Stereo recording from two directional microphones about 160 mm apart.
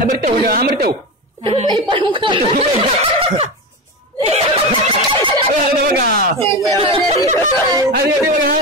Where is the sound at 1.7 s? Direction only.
30° right (ahead or behind).